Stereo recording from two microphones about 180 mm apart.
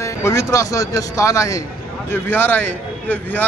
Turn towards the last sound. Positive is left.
turn(degrees=10)  # may be behind; listen again after turning